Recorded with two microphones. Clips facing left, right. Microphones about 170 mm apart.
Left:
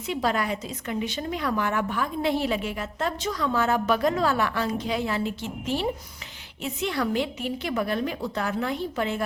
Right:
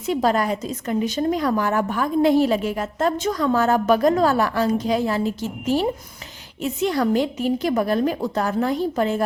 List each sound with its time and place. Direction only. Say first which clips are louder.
0.1 s a woman's voice: right 6 dB; 40° right (ahead or behind)